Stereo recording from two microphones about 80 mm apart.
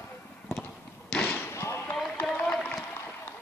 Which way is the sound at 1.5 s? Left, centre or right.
Left.